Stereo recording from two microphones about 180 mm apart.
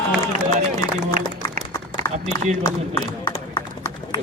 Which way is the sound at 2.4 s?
40° right (ahead or behind).